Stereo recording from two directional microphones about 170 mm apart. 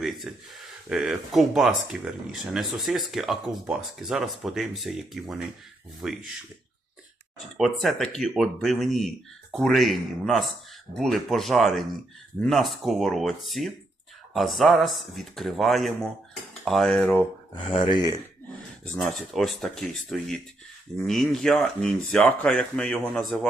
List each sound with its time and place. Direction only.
0.0 s speech: centre (ahead or behind)
7.5 s speech: centre (ahead or behind)
17.5 s speech: 30° left (ahead or behind)
18.9 s speech: centre (ahead or behind)